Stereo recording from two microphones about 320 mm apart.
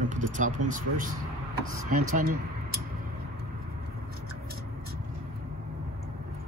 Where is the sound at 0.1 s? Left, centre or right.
Right.